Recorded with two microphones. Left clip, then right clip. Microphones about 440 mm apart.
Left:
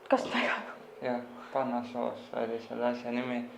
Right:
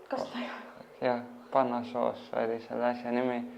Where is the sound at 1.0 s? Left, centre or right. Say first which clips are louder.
Right 4 dB; right.